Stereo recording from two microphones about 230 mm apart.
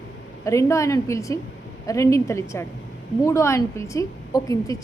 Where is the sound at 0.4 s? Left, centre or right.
Centre.